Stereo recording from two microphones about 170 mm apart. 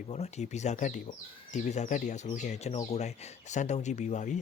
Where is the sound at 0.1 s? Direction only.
40° left (ahead or behind).